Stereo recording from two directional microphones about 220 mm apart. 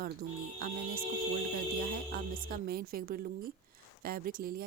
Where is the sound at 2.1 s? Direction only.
40° right (ahead or behind).